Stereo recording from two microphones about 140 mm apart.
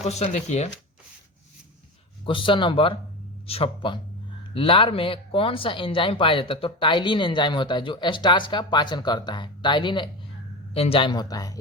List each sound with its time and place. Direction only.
0.0 s speech: 50° left (ahead or behind)
2.2 s speech: 35° left (ahead or behind)